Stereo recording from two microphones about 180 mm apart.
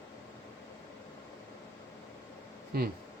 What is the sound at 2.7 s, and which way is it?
Speech, 60° right (ahead or behind).